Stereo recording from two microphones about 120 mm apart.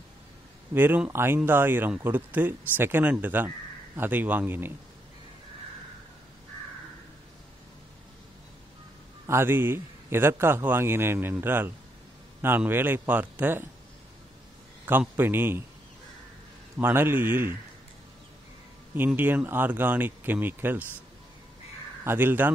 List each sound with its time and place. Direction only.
0.7 s speech: 15° right (ahead or behind)
9.2 s a man's voice: 20° right (ahead or behind)
14.9 s speech: 15° right (ahead or behind)
16.7 s speech: 20° right (ahead or behind)
18.9 s speech: 15° right (ahead or behind)
22.0 s speech: 15° right (ahead or behind)